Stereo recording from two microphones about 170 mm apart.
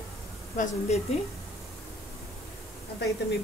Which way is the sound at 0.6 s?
40° left (ahead or behind).